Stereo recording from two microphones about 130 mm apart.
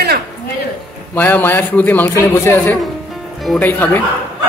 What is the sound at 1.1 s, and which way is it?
A man's voice, 15° left (ahead or behind).